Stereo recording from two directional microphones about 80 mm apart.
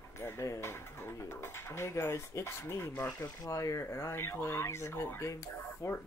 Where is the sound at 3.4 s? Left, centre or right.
Left.